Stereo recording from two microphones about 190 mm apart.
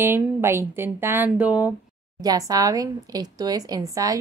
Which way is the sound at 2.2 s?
20° right (ahead or behind).